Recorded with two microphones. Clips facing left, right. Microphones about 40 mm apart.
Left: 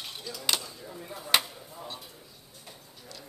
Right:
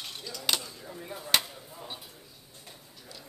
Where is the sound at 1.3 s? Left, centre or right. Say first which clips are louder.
Left 2 dB; centre.